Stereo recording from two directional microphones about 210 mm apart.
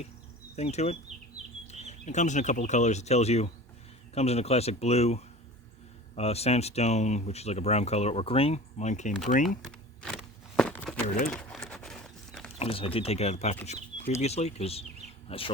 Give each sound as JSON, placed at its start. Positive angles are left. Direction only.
{"t": 0.5, "sound": "speech", "side_deg": 30}
{"t": 10.6, "sound": "a sound", "side_deg": 5}
{"t": 12.5, "sound": "speech", "side_deg": 25}